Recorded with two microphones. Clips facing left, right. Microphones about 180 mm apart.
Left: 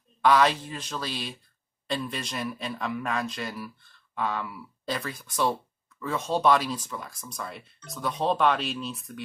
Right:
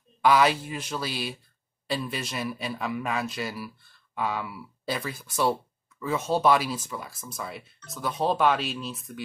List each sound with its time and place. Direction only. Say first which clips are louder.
0.2 s speech: even; 10° right (ahead or behind)